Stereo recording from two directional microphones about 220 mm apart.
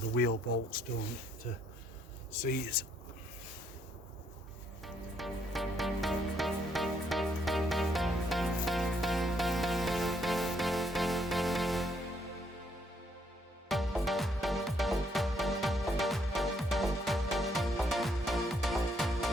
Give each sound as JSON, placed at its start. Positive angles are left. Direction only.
{"t": 0.1, "sound": "speech", "side_deg": 45}
{"t": 2.4, "sound": "speech", "side_deg": 40}
{"t": 4.8, "sound": "music", "side_deg": 0}
{"t": 13.7, "sound": "music", "side_deg": 0}